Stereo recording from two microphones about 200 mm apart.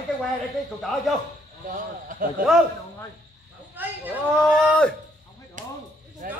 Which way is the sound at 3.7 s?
10° right (ahead or behind).